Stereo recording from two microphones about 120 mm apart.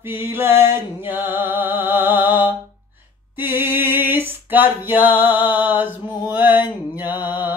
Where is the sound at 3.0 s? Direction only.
15° right (ahead or behind).